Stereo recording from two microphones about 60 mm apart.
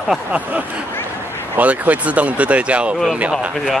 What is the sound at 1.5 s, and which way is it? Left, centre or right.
Speech, right.